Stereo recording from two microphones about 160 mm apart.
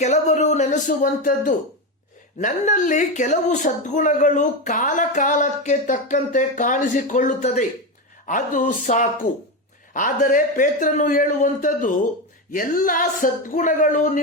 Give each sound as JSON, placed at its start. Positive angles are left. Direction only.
{"t": 0.0, "sound": "a woman's voice", "side_deg": 45}